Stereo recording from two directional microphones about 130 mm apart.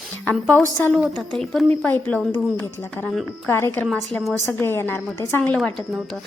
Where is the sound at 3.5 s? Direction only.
20° left (ahead or behind).